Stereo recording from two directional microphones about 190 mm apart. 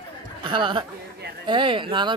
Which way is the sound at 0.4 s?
25° right (ahead or behind).